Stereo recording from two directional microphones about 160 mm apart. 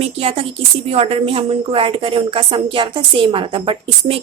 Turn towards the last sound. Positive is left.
turn(degrees=-35)  # may be behind; listen again after turning